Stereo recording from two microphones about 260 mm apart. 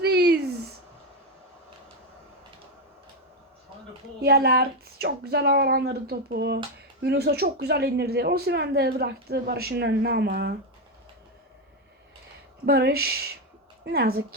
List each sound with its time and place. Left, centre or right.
0.0 s a sound: right
4.2 s speech: right
12.6 s speech: right